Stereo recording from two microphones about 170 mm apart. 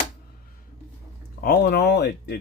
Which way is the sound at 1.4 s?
65° left (ahead or behind).